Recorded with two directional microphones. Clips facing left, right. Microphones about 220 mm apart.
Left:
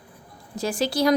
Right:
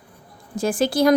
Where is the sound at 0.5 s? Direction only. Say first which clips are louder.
Right 4 dB; 50° right (ahead or behind).